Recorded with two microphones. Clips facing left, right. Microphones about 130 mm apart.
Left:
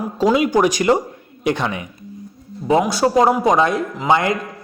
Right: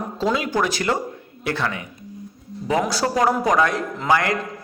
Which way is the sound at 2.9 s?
20° left (ahead or behind).